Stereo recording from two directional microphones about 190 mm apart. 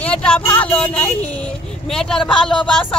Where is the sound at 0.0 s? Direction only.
5° left (ahead or behind).